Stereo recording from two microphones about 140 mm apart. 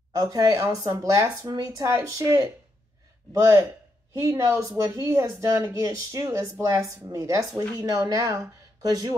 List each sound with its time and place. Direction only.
0.1 s speech: 25° right (ahead or behind)